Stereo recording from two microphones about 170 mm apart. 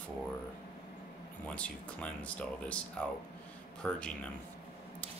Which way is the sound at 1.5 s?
5° left (ahead or behind).